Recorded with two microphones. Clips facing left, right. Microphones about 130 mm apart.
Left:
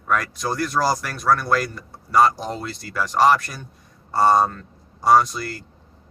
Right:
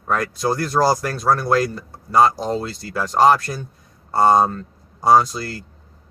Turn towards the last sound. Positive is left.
turn(degrees=-25)  # may be behind; listen again after turning